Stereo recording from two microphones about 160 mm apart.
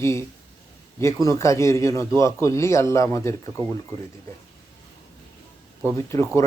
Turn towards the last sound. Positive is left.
turn(degrees=15)  # may be behind; listen again after turning